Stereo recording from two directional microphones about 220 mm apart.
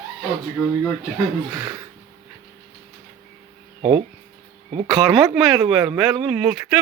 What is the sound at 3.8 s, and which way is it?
Speech, 25° right (ahead or behind).